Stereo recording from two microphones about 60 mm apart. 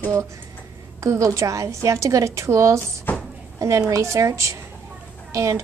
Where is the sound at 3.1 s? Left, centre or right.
Left.